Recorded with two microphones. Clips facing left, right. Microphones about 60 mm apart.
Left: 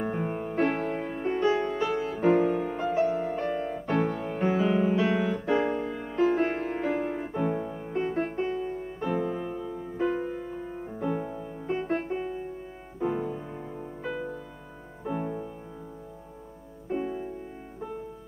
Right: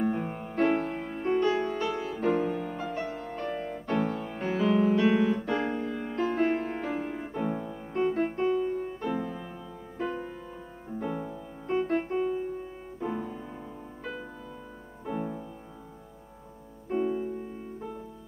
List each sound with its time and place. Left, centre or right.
0.0 s music: centre
1.5 s music: centre
1.8 s music: centre
8.0 s piano: centre
9.3 s music: centre
16.9 s music: centre